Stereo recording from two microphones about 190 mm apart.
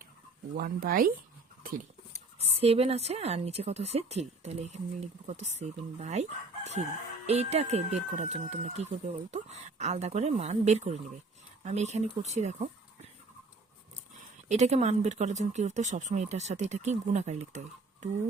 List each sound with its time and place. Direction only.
0.5 s speech: 50° right (ahead or behind)
2.4 s speech: 30° right (ahead or behind)
7.3 s speech: 35° right (ahead or behind)
14.4 s speech: 35° right (ahead or behind)